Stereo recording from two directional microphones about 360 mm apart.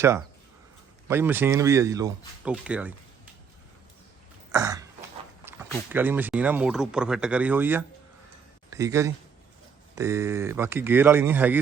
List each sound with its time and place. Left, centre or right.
0.0 s speech: centre
4.5 s throat clearing: centre
5.5 s speech: centre